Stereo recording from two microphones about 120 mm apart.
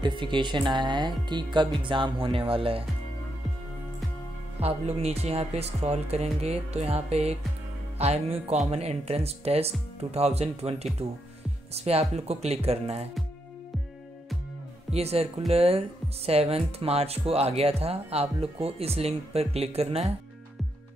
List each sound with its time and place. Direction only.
0.0 s speech: 40° right (ahead or behind)
4.6 s speech: 60° right (ahead or behind)
14.9 s speech: 60° right (ahead or behind)